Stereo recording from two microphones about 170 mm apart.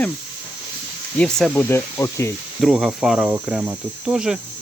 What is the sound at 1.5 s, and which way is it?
Speech, 15° left (ahead or behind).